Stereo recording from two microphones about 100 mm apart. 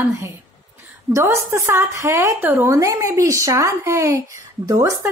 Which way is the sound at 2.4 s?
20° right (ahead or behind).